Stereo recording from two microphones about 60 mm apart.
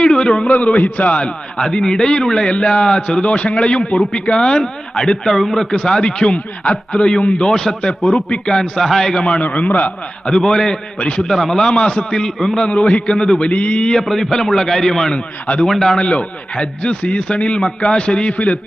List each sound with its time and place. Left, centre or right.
0.0 s a sound: centre
0.5 s a man's voice: left
1.5 s a man's voice: centre
5.7 s a man's voice: centre
9.4 s a man's voice: left
10.2 s a man's voice: centre
13.5 s a man's voice: left; by 16.0 s centre
16.0 s a man's voice: centre